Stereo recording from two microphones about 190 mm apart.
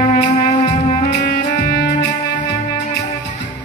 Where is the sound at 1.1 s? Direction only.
55° left (ahead or behind).